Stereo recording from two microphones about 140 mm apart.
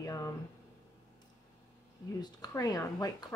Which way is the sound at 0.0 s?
25° left (ahead or behind).